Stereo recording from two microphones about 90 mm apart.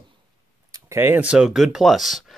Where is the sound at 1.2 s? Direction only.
10° right (ahead or behind).